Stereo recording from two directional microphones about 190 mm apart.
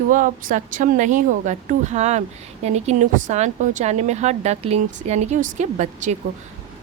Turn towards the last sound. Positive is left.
turn(degrees=-40)  # may be behind; listen again after turning